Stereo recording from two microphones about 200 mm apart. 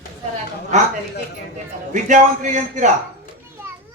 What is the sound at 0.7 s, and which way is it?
Speech, 35° right (ahead or behind).